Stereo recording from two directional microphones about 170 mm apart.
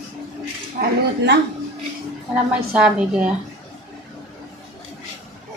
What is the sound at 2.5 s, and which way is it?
Speech, 5° right (ahead or behind).